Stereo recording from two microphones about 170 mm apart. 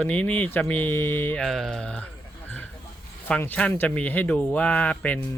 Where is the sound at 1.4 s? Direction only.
Centre (ahead or behind).